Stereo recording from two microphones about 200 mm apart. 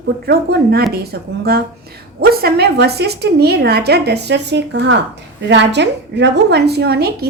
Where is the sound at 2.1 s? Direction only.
50° right (ahead or behind).